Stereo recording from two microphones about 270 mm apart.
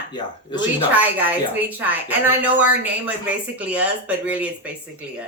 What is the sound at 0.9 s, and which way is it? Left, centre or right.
Speech, centre.